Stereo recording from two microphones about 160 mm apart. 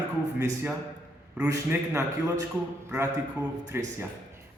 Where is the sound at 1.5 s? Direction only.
20° right (ahead or behind).